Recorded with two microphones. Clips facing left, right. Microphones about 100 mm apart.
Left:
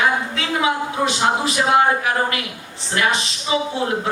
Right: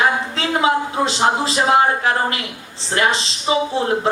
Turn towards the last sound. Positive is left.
turn(degrees=-30)  # may be behind; listen again after turning